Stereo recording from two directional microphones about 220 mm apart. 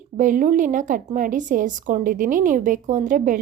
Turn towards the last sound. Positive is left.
turn(degrees=-35)  # may be behind; listen again after turning